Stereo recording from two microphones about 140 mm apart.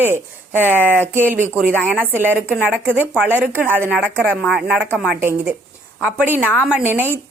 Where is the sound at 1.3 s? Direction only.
15° right (ahead or behind).